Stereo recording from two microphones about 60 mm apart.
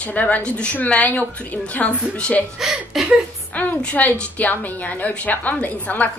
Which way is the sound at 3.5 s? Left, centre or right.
Left.